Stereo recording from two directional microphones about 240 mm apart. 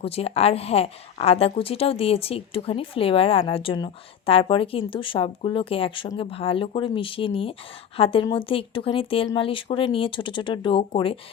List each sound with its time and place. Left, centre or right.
0.0 s a woman's voice: left